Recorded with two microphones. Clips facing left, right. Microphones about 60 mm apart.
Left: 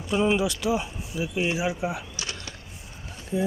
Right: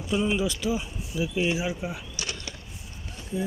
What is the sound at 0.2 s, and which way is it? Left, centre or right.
Speech, left.